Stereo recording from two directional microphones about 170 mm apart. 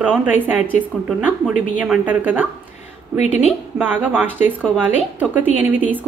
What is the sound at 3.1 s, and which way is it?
Speech, 40° left (ahead or behind).